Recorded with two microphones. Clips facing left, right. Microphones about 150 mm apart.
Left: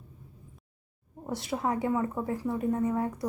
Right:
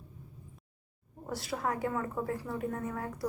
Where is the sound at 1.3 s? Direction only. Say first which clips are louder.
Left 4 dB; 20° left (ahead or behind).